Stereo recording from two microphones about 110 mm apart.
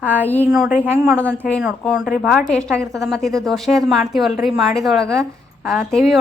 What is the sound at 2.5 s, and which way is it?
A woman's voice, 10° left (ahead or behind).